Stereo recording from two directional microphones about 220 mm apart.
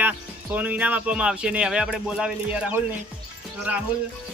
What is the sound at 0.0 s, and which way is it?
Speech, 5° right (ahead or behind).